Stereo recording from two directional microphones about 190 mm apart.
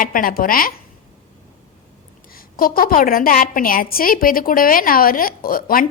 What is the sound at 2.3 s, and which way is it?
A woman's voice, 50° left (ahead or behind).